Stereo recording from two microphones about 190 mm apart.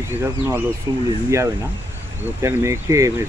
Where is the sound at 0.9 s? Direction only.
20° right (ahead or behind).